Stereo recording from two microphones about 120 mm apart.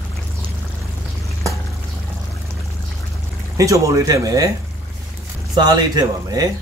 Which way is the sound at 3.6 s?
25° right (ahead or behind).